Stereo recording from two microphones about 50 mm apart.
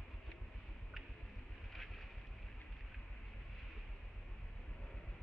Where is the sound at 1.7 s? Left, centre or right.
Centre.